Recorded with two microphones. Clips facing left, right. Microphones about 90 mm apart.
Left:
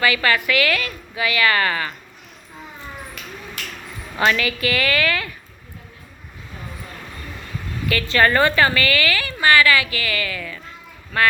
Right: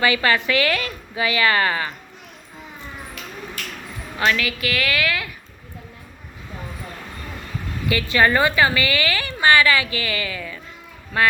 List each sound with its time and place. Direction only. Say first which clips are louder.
0.0 s a woman's voice: even; 25° right (ahead or behind)
4.2 s a woman's voice: left 2 dB; centre (ahead or behind)
7.9 s a woman's voice: even; 15° right (ahead or behind)